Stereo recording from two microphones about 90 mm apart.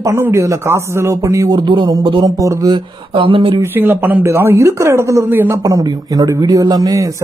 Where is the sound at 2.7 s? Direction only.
70° right (ahead or behind).